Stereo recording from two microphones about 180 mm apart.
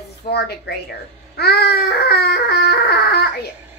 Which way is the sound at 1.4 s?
65° left (ahead or behind).